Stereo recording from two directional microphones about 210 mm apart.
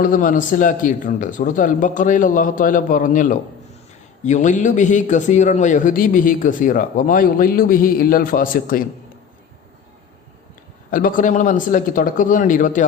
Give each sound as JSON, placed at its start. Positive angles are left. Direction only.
{"t": 0.0, "sound": "a man's voice", "side_deg": 40}
{"t": 10.9, "sound": "a man's voice", "side_deg": 40}